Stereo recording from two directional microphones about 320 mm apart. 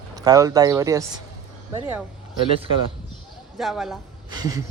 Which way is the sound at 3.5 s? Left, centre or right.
Centre.